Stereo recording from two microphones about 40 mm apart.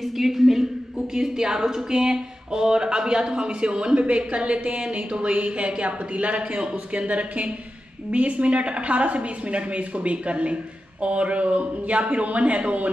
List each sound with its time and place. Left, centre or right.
0.0 s a woman's voice: centre; by 12.9 s right